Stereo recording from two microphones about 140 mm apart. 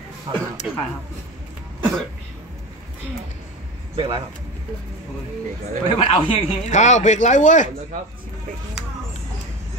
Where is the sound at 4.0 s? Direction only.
30° right (ahead or behind).